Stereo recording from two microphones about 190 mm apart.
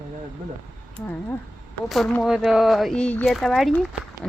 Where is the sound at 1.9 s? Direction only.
Centre (ahead or behind).